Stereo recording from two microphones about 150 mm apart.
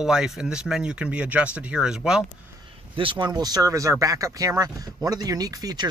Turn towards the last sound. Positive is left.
turn(degrees=-25)  # may be behind; listen again after turning